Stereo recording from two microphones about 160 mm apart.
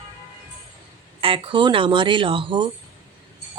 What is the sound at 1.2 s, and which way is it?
Speech, 30° right (ahead or behind).